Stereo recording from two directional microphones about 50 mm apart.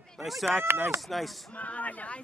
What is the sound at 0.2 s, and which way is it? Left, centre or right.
Speech, centre.